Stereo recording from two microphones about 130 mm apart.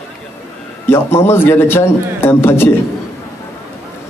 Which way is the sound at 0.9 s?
20° left (ahead or behind).